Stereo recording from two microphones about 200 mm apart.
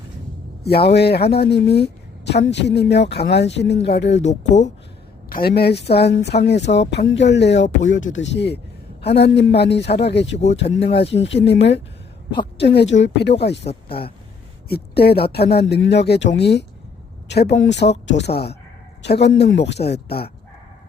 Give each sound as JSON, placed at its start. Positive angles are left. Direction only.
{"t": 0.6, "sound": "speech", "side_deg": 55}
{"t": 4.2, "sound": "speech", "side_deg": 35}
{"t": 5.3, "sound": "a man's voice", "side_deg": 50}
{"t": 10.4, "sound": "speech", "side_deg": 35}
{"t": 12.5, "sound": "speech", "side_deg": 60}
{"t": 14.7, "sound": "speech", "side_deg": 50}